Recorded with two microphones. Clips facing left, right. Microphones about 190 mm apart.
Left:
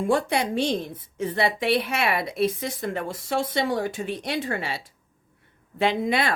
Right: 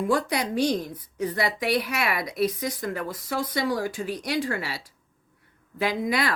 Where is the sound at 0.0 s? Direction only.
25° left (ahead or behind).